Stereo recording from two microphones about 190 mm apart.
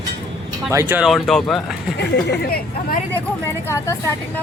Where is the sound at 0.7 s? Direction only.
15° right (ahead or behind).